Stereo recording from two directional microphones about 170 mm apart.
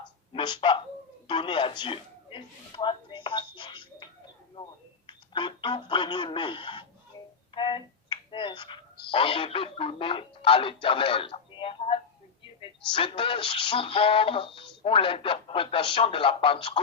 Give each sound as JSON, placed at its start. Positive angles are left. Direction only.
{"t": 0.3, "sound": "speech", "side_deg": 25}
{"t": 1.3, "sound": "a sound", "side_deg": 30}
{"t": 5.0, "sound": "speech", "side_deg": 30}